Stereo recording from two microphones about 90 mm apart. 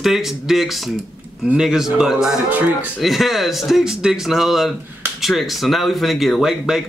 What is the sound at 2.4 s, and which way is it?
Speech, 20° right (ahead or behind).